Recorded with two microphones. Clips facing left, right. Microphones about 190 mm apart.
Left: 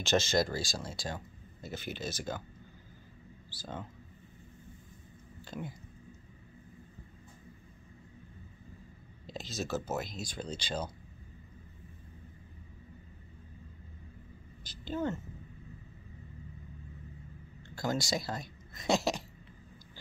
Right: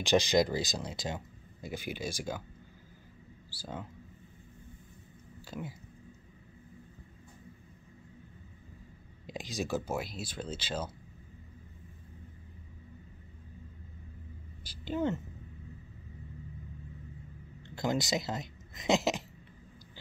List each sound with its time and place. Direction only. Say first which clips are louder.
0.0 s speech: right 3 dB; 15° right (ahead or behind)
3.4 s speech: right 1 dB; 10° right (ahead or behind)
5.5 s speech: even; 5° right (ahead or behind)
9.2 s speech: right 2 dB; 15° right (ahead or behind)
14.6 s a woman's voice: right 2 dB; 10° right (ahead or behind)
17.6 s speech: right 2 dB; 20° right (ahead or behind)